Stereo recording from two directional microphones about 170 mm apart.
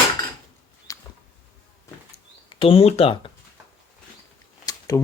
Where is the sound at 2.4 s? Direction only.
30° left (ahead or behind).